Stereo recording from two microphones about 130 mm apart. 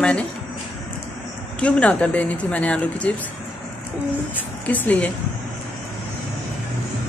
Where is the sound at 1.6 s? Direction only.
10° left (ahead or behind).